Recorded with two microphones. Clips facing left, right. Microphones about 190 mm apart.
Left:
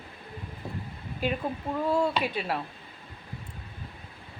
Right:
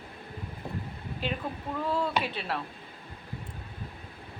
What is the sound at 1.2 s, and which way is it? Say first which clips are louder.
A woman's voice: left 4 dB; 10° left (ahead or behind).